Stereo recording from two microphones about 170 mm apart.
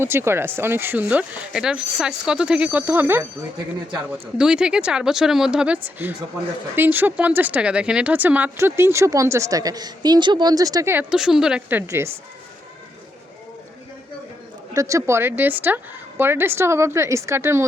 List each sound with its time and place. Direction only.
0.0 s speech: 15° right (ahead or behind)
4.4 s speech: 5° right (ahead or behind)
11.1 s speech: 5° right (ahead or behind)
14.7 s speech: 20° right (ahead or behind)